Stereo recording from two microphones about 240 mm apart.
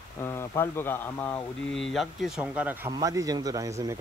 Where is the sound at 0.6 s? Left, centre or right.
Centre.